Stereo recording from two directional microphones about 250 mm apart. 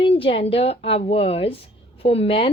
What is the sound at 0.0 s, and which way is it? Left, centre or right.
Speech, left.